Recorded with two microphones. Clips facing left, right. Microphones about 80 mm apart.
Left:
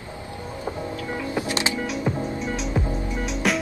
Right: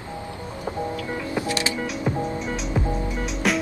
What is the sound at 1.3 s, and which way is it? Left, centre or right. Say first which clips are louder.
Music: even; left.